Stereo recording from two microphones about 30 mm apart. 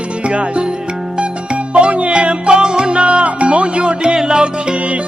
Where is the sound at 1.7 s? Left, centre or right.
Right.